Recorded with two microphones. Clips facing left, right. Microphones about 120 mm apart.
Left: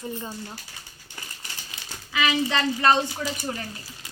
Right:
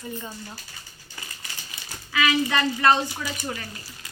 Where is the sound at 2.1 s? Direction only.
20° left (ahead or behind).